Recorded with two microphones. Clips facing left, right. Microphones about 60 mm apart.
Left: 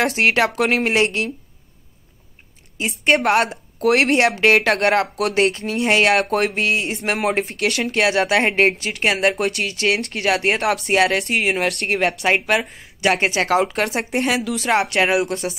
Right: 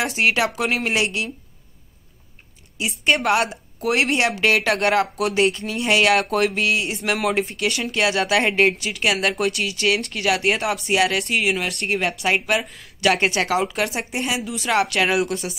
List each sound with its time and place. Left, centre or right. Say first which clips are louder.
0.0 s speech: left 3 dB; left
2.8 s speech: left 3 dB; left
3.4 s speech: left 5 dB; left
10.6 s speech: left 3 dB; left
13.5 s speech: left 3 dB; left
14.7 s speech: left 2 dB; left